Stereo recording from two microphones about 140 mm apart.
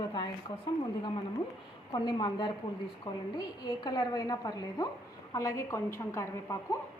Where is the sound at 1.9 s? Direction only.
30° left (ahead or behind).